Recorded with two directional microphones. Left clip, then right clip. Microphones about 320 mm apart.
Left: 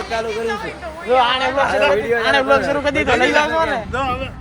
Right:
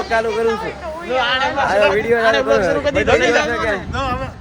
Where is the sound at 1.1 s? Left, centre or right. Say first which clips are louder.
Left 2 dB; centre.